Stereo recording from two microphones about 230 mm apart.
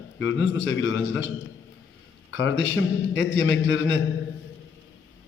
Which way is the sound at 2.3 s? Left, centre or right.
Left.